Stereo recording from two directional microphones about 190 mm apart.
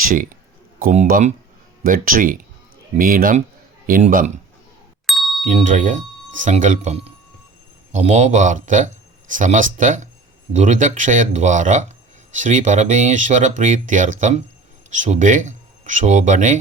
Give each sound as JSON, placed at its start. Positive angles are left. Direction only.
{"t": 0.0, "sound": "speech", "side_deg": -45}
{"t": 5.0, "sound": "ding", "side_deg": 0}
{"t": 5.5, "sound": "speech", "side_deg": -40}